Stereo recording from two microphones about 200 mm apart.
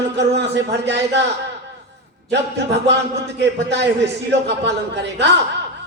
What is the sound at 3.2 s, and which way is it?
A man's voice, 60° right (ahead or behind).